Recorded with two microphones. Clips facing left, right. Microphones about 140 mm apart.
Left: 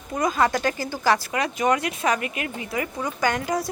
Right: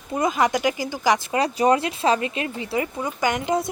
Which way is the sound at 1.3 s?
30° right (ahead or behind).